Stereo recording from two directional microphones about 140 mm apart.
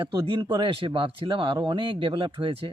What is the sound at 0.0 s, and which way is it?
Speech, 35° right (ahead or behind).